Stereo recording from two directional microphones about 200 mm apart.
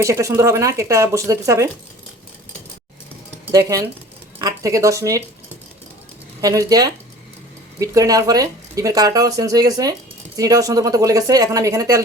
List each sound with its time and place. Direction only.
0.0 s speech: 15° right (ahead or behind)
3.4 s speech: 15° right (ahead or behind)
6.4 s speech: 15° right (ahead or behind)